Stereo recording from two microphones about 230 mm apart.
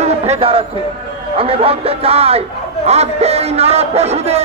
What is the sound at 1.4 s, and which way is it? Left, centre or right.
A man's voice, right.